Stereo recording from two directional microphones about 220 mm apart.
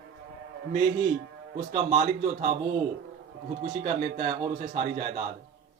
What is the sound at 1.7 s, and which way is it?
Speech, 45° right (ahead or behind).